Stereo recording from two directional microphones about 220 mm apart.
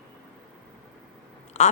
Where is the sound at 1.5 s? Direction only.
30° left (ahead or behind).